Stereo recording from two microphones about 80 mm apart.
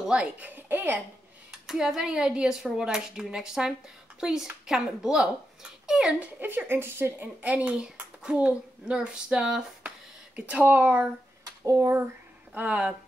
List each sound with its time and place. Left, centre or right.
0.0 s speech: centre
0.6 s speech: right
1.7 s speech: centre
9.8 s a sound: centre
11.4 s speech: right
12.5 s speech: centre